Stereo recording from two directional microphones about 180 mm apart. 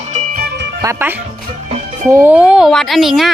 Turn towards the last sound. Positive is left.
turn(degrees=0)  # may be behind; listen again after turning